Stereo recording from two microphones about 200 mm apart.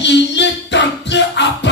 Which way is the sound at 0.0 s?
60° left (ahead or behind).